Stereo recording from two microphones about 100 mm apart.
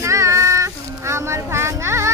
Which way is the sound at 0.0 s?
30° right (ahead or behind).